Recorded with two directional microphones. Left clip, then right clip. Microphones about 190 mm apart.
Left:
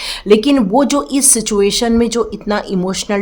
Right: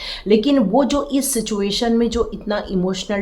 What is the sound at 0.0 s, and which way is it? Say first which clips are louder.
Speech: left 5 dB; 40° left (ahead or behind).